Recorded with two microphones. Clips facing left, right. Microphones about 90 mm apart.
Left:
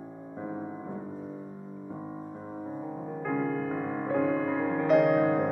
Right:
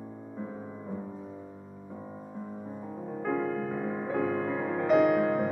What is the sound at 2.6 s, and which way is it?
Music, 10° left (ahead or behind).